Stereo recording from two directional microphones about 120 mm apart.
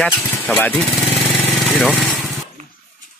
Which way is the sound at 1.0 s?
Centre (ahead or behind).